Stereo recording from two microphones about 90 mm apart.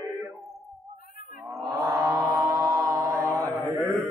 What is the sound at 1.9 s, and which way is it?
Mantra, 45° right (ahead or behind).